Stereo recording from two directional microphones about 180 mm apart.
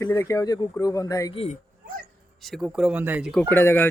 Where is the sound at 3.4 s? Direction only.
10° left (ahead or behind).